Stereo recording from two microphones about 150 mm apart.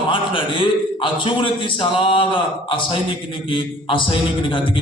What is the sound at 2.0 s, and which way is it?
Speech, 35° left (ahead or behind).